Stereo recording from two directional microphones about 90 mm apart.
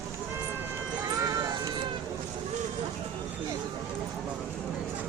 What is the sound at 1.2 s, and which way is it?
Music, 45° right (ahead or behind).